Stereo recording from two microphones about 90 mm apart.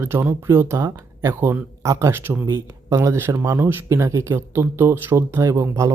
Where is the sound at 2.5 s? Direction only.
35° right (ahead or behind).